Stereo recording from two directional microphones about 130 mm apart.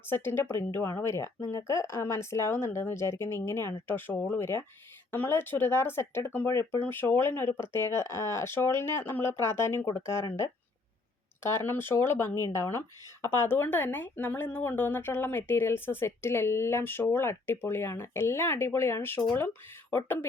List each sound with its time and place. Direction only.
0.1 s a woman's voice: 15° left (ahead or behind)
11.4 s a woman's voice: 15° left (ahead or behind)